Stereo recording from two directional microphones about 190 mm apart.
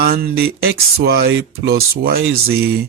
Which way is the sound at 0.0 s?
50° right (ahead or behind).